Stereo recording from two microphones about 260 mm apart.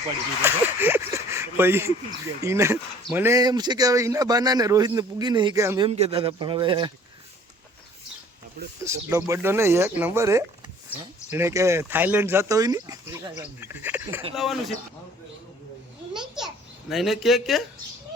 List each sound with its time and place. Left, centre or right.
0.4 s speech: centre
5.9 s speech: right
8.8 s a man's voice: centre
16.1 s a man's voice: centre